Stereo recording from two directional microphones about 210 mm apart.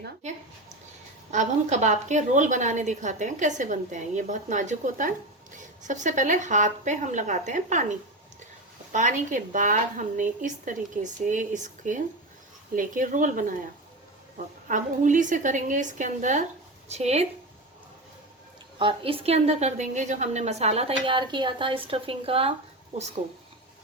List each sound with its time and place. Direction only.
1.3 s a woman's voice: 35° right (ahead or behind)
18.8 s a woman's voice: 25° right (ahead or behind)